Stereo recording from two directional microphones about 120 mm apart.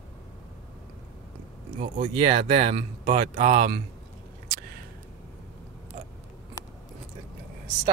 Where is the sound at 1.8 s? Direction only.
55° right (ahead or behind).